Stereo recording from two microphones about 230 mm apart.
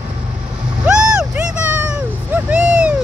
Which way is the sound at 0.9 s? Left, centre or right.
Centre.